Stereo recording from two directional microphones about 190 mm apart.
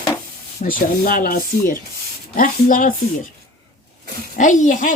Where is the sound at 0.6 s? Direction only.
50° left (ahead or behind).